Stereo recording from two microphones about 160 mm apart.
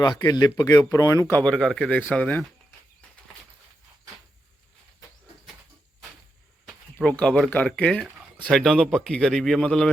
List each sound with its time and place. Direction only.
0.0 s speech: 25° left (ahead or behind); by 2.5 s 10° left (ahead or behind)
6.7 s speech: 5° left (ahead or behind)